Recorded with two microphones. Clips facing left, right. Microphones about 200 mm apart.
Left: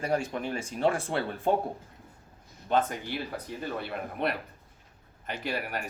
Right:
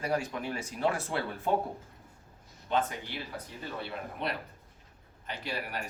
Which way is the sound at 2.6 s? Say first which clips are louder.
Left 4 dB; 45° left (ahead or behind).